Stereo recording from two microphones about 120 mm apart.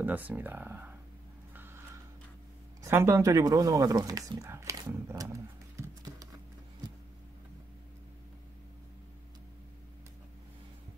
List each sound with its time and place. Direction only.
0.0 s speech: 15° right (ahead or behind)
1.5 s a sound: 15° right (ahead or behind)
2.8 s speech: 20° right (ahead or behind)
4.5 s horse: 25° right (ahead or behind)